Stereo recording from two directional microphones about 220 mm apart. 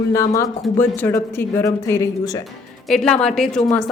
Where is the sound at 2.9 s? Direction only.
Centre (ahead or behind).